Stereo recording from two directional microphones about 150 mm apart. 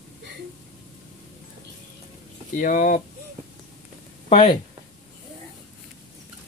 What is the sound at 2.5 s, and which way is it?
Speech, 60° left (ahead or behind).